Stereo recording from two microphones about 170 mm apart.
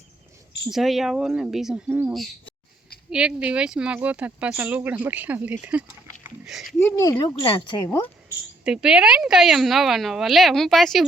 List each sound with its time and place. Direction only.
0.7 s a woman's voice: centre (ahead or behind)
6.2 s a sound: centre (ahead or behind)
7.0 s speech: 15° left (ahead or behind)
8.6 s a woman's voice: 5° right (ahead or behind)